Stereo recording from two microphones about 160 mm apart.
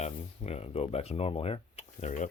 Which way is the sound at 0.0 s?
40° left (ahead or behind).